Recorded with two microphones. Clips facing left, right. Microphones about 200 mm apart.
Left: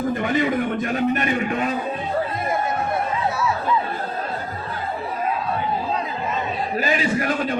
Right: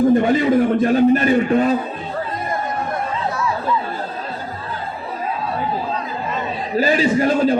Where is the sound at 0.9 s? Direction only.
30° right (ahead or behind).